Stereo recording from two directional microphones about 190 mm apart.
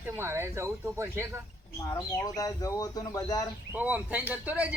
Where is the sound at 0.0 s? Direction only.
10° right (ahead or behind).